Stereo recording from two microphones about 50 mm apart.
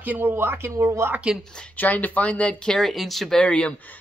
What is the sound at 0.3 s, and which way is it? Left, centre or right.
Speech, right.